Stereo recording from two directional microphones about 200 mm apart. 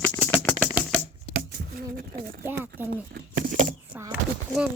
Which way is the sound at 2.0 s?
45° right (ahead or behind).